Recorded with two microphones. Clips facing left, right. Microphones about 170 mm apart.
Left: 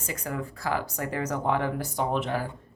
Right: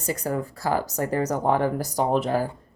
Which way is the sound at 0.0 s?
35° right (ahead or behind).